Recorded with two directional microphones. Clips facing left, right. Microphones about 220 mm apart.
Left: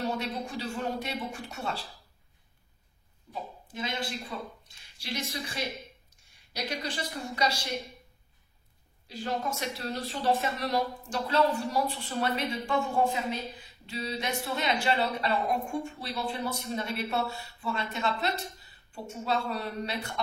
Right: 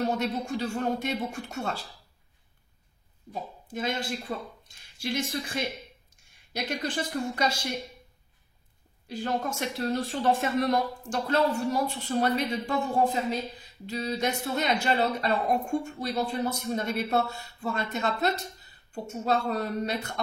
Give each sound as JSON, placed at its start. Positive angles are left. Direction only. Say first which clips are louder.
{"t": 0.3, "sound": "speech", "louder": "right 5 dB", "side_deg": -45}
{"t": 3.3, "sound": "speech", "louder": "right 3 dB", "side_deg": -45}
{"t": 9.1, "sound": "speech", "louder": "right 3 dB", "side_deg": -50}